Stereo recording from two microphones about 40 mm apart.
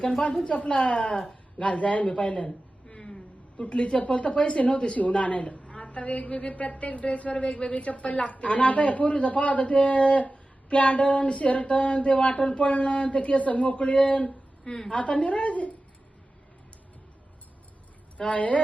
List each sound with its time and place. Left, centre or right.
0.4 s a woman's voice: left
1.5 s a woman's voice: left
2.8 s a sound: centre
3.6 s a woman's voice: left
14.3 s a sound: centre
14.8 s a woman's voice: left
18.2 s a woman's voice: left